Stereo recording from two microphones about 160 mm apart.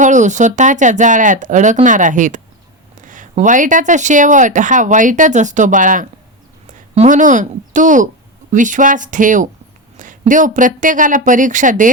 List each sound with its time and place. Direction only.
0.0 s a woman's voice: 50° right (ahead or behind)